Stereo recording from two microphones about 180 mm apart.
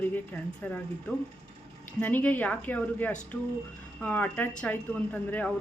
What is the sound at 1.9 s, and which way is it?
Speech, 10° left (ahead or behind).